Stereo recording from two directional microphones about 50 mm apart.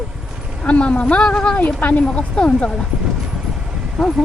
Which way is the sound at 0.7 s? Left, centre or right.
Left.